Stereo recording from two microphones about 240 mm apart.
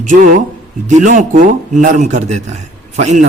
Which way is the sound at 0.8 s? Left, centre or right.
Right.